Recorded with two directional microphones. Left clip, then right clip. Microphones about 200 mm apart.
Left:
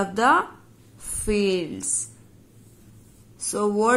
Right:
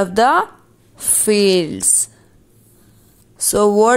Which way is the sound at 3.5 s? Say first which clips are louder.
Right 9 dB; 30° right (ahead or behind).